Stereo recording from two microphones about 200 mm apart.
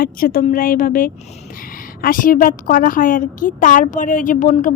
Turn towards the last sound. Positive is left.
turn(degrees=40)  # may be behind; listen again after turning